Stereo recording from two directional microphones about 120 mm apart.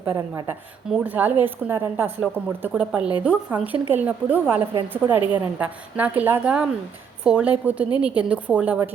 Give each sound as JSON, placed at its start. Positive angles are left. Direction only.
{"t": 0.9, "sound": "a woman's voice", "side_deg": -10}